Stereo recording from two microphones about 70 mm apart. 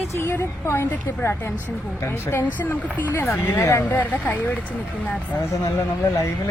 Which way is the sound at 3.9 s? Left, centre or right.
Left.